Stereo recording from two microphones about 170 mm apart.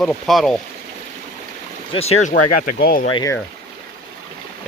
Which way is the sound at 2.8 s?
60° left (ahead or behind).